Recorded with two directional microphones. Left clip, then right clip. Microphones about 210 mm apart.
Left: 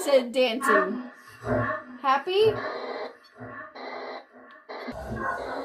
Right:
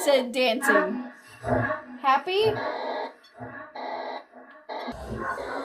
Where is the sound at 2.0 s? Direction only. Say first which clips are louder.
Even; 20° right (ahead or behind).